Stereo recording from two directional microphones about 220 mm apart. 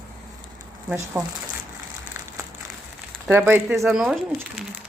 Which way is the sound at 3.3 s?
10° right (ahead or behind).